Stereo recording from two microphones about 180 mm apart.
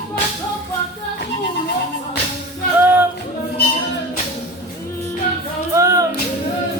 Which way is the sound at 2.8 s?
10° right (ahead or behind).